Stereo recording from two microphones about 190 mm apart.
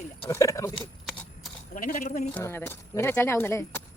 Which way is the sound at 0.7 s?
Centre (ahead or behind).